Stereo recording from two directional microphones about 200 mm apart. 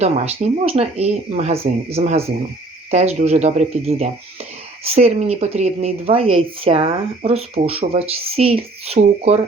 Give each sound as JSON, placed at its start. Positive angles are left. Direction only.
{"t": 0.0, "sound": "speech", "side_deg": -30}